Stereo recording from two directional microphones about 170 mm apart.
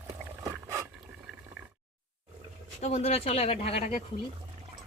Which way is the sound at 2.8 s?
40° left (ahead or behind).